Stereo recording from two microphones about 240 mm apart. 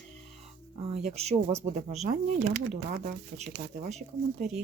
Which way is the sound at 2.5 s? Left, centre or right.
Right.